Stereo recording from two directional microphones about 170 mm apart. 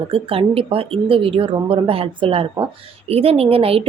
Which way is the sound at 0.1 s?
35° right (ahead or behind).